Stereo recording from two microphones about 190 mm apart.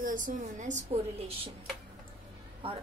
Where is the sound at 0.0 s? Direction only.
45° right (ahead or behind).